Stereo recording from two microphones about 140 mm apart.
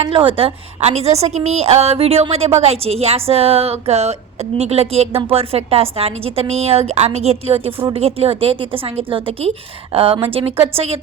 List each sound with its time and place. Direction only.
0.1 s a woman's voice: 40° right (ahead or behind)